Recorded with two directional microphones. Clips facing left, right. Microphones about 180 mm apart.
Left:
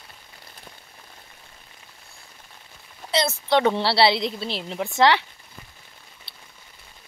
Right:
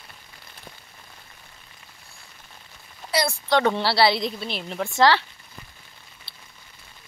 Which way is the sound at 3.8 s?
25° left (ahead or behind).